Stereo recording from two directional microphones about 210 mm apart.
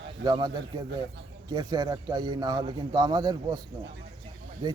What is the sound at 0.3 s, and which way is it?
A man's voice, 20° right (ahead or behind).